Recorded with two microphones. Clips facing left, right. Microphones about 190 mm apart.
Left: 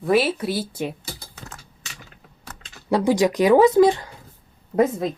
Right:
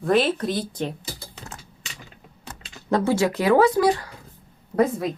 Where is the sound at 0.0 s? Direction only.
5° left (ahead or behind).